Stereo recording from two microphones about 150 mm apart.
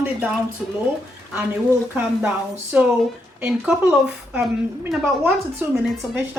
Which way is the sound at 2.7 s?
10° right (ahead or behind).